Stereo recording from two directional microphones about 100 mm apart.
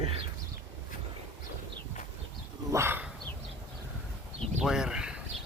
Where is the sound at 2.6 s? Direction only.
25° right (ahead or behind).